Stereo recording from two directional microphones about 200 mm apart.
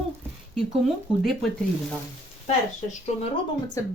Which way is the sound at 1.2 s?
Centre (ahead or behind).